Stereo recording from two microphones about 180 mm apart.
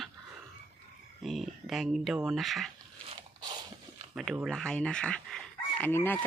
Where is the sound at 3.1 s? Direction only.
25° right (ahead or behind).